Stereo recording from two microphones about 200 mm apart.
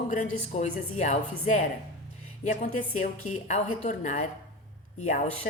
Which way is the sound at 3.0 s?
35° left (ahead or behind).